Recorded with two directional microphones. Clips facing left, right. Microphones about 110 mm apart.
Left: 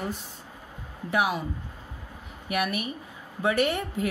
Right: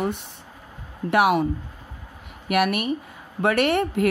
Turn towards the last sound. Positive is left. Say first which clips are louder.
# right 5 dB
turn(degrees=-70)  # may be behind; listen again after turning